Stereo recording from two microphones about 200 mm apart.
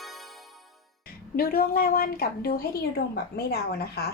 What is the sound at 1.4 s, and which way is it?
Speech, 50° left (ahead or behind).